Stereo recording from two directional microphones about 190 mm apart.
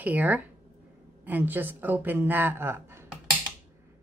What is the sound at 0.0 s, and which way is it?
A woman's voice, 10° right (ahead or behind).